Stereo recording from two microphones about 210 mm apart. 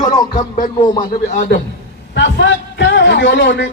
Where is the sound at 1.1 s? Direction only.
35° left (ahead or behind).